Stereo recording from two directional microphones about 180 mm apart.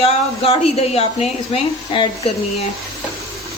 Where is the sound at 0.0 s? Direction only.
35° left (ahead or behind).